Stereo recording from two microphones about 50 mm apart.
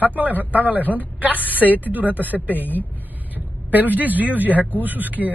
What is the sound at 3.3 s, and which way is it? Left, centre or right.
Vehicle, right.